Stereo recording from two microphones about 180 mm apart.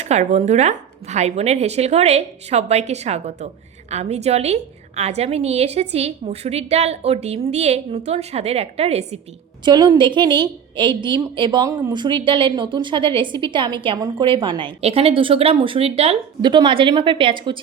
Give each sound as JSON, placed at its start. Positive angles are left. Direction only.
{"t": 0.0, "sound": "a woman's voice", "side_deg": -40}
{"t": 9.6, "sound": "a woman's voice", "side_deg": -25}